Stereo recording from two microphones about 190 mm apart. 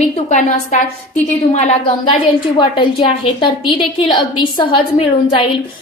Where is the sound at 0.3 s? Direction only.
40° left (ahead or behind).